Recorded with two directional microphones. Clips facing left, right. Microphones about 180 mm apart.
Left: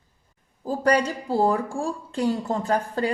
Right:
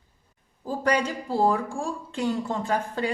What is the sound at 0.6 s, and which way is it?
Speech, 40° left (ahead or behind).